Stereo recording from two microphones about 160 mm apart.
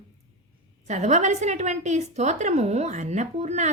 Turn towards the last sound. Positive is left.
turn(degrees=-45)  # may be behind; listen again after turning